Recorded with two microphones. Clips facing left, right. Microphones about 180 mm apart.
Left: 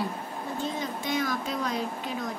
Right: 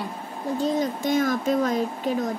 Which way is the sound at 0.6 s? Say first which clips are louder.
Right 9 dB; 40° right (ahead or behind).